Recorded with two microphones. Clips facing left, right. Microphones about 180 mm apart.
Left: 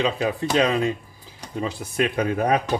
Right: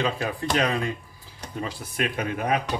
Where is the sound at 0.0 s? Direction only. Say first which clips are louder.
Left 4 dB; 20° left (ahead or behind); by 2.6 s 35° left (ahead or behind).